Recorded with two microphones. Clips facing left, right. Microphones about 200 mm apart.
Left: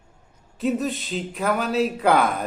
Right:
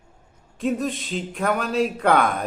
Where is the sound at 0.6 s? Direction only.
Centre (ahead or behind).